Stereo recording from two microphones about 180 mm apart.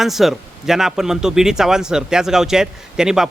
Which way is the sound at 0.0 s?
Centre (ahead or behind).